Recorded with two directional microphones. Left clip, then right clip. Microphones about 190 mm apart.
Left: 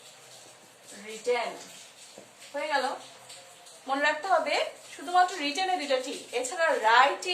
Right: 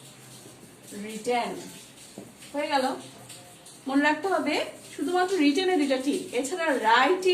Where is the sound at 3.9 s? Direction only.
25° left (ahead or behind).